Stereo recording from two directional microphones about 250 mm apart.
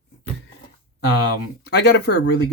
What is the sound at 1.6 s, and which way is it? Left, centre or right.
Speech, left.